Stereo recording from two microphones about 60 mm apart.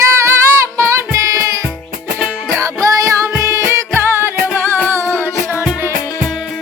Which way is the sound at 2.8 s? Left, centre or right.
Right.